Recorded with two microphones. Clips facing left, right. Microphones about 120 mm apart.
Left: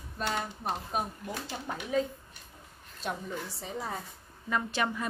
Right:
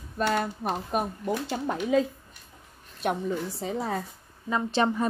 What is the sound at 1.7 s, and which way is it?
Speech, 90° right.